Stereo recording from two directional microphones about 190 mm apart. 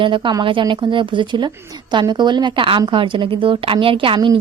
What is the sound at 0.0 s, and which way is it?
A woman's voice, 25° right (ahead or behind).